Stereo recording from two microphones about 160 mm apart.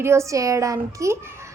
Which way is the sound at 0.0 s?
15° right (ahead or behind).